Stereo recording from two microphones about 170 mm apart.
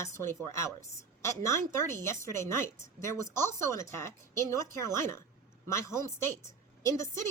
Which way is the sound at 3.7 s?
15° left (ahead or behind).